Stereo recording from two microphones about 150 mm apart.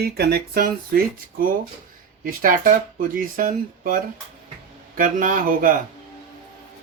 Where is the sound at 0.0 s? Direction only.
90° right; by 5.7 s 65° right (ahead or behind).